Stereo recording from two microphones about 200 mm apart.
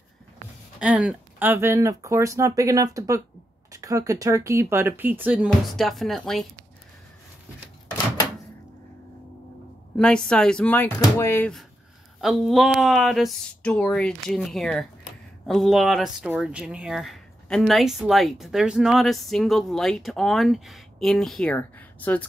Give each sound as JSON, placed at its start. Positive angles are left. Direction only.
{"t": 0.7, "sound": "speech", "side_deg": -5}
{"t": 9.9, "sound": "speech", "side_deg": 5}